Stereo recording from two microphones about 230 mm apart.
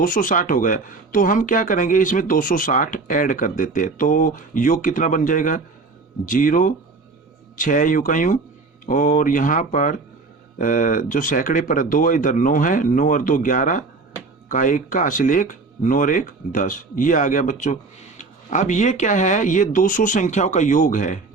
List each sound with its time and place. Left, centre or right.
0.0 s speech: left